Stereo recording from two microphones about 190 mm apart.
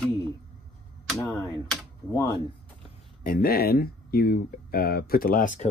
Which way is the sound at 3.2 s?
50° left (ahead or behind).